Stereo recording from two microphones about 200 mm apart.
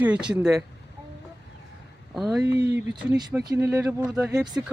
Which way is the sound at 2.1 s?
Centre (ahead or behind).